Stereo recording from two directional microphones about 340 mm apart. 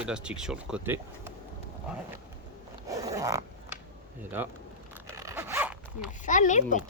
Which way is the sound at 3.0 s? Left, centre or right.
Centre.